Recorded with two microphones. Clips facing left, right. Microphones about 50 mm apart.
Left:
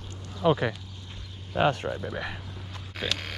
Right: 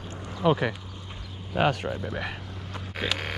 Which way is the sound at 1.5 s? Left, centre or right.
Right.